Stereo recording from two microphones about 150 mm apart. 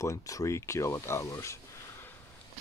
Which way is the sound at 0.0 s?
20° left (ahead or behind).